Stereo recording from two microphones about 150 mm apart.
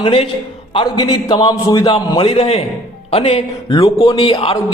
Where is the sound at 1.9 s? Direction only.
40° left (ahead or behind).